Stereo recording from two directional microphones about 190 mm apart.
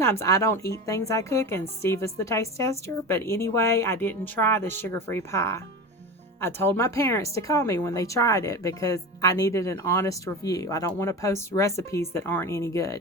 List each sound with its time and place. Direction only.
0.0 s speech: 15° left (ahead or behind)